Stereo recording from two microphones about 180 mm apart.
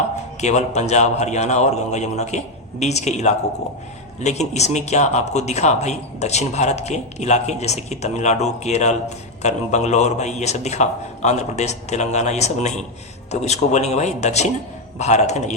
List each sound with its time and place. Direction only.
0.4 s speech: 40° left (ahead or behind)